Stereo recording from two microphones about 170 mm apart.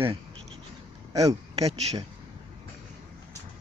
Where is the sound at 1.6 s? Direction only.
40° right (ahead or behind).